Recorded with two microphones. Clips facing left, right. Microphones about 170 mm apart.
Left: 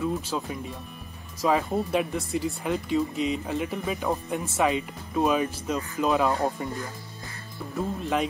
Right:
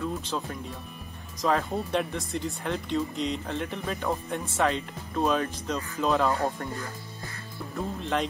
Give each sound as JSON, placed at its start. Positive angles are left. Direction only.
{"t": 0.0, "sound": "speech", "side_deg": 10}
{"t": 6.4, "sound": "speech", "side_deg": 15}
{"t": 7.7, "sound": "speech", "side_deg": 5}